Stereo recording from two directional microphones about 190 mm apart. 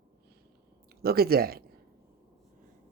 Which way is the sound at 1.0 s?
55° right (ahead or behind).